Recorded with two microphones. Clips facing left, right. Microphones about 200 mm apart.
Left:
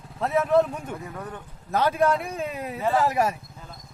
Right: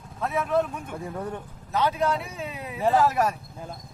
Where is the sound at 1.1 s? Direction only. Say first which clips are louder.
Right 4 dB; 30° right (ahead or behind).